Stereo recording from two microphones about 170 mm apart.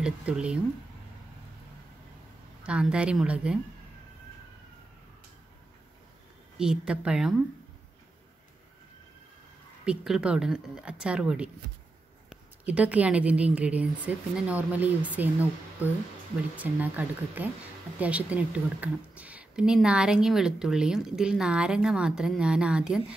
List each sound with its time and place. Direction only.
0.0 s speech: 5° right (ahead or behind)
2.6 s speech: 5° right (ahead or behind)
6.6 s speech: 5° right (ahead or behind)
9.8 s a woman's voice: 5° right (ahead or behind)